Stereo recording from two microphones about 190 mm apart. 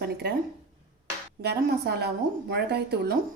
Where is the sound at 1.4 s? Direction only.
55° right (ahead or behind).